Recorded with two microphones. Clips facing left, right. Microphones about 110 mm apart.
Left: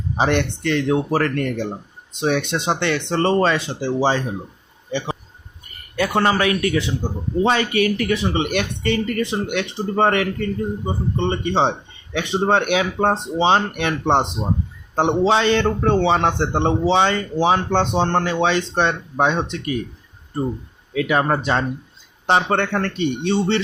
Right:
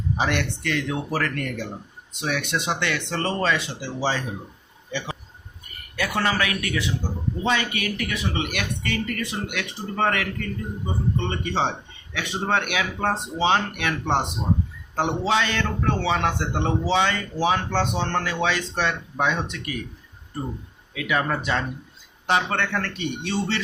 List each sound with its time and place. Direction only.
0.2 s speech: 30° left (ahead or behind)
15.3 s speech: 30° left (ahead or behind)
20.9 s speech: 35° left (ahead or behind)